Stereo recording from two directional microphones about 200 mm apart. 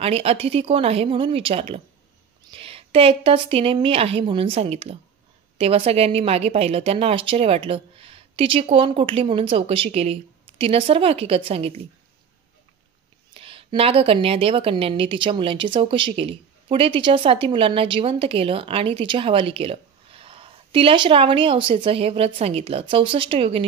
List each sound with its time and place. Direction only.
0.0 s speech: 30° right (ahead or behind)
13.3 s speech: 25° right (ahead or behind)